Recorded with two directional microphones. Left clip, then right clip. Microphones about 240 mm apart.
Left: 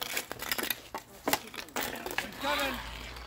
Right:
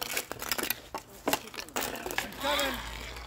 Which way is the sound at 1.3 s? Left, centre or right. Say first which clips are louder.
Even; centre.